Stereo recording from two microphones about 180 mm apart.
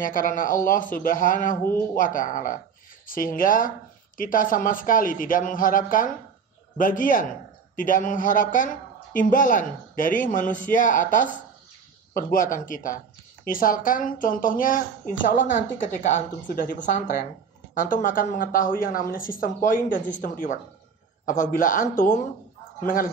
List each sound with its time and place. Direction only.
0.0 s a woman's voice: 50° left (ahead or behind)